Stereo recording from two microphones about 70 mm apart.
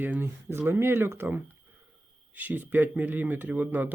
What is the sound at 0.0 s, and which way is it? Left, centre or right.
Speech, right.